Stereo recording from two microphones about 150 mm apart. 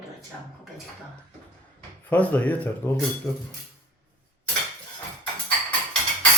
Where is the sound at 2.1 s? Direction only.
10° left (ahead or behind).